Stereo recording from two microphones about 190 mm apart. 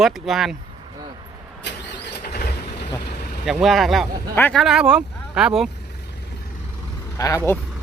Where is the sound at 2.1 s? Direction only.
55° left (ahead or behind).